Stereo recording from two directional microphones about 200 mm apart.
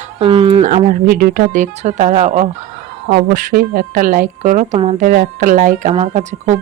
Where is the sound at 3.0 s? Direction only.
45° right (ahead or behind).